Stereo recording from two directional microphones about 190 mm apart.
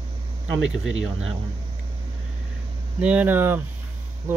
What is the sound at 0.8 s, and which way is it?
Speech, 90° right.